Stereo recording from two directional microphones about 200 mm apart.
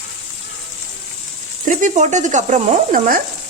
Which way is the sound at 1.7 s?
40° right (ahead or behind).